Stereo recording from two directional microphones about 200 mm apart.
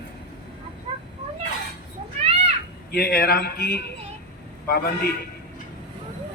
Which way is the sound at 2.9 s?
50° left (ahead or behind).